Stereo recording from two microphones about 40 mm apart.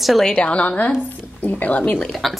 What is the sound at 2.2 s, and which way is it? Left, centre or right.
Speech, centre.